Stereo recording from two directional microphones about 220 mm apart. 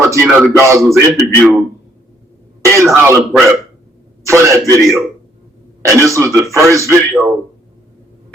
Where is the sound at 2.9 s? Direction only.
5° right (ahead or behind).